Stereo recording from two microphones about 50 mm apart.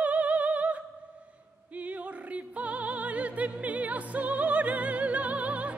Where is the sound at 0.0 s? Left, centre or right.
Right.